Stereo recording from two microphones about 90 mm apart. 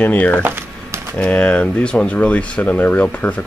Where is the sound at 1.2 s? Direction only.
10° left (ahead or behind).